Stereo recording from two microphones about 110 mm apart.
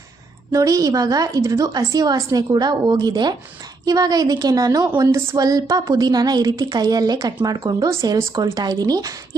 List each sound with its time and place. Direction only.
0.5 s a woman's voice: 30° right (ahead or behind)